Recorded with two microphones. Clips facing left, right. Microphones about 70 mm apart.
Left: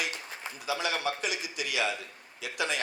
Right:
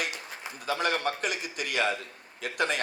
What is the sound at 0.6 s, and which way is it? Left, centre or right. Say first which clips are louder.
A man's voice: right 3 dB; right.